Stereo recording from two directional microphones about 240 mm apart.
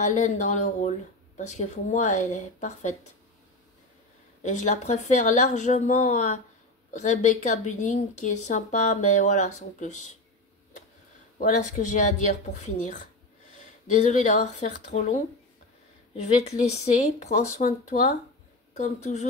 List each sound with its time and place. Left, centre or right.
0.0 s a woman's voice: left
4.4 s a woman's voice: left
11.3 s a woman's voice: left